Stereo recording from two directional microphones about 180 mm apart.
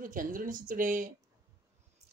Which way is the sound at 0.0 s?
50° right (ahead or behind).